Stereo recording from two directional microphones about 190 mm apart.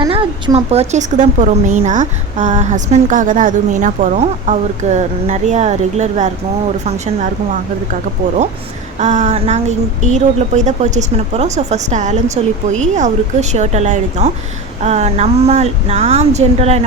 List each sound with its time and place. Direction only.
0.0 s a woman's voice: 25° right (ahead or behind)
9.0 s a woman's voice: 40° right (ahead or behind)